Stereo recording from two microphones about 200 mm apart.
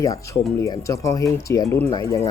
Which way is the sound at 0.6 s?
15° left (ahead or behind).